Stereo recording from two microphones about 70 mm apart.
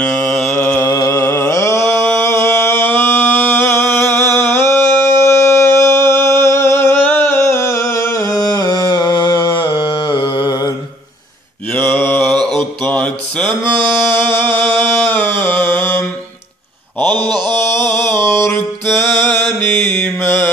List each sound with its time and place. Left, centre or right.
0.0 s mantra: centre
0.8 s music: left
1.2 s a sound: left
11.9 s mantra: left
12.2 s mantra: centre
12.8 s mantra: centre
14.1 s music: left
17.0 s mantra: right
17.7 s music: left
19.2 s mantra: left
20.2 s mantra: left